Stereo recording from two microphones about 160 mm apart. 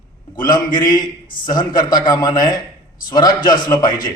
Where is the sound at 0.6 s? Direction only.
60° left (ahead or behind).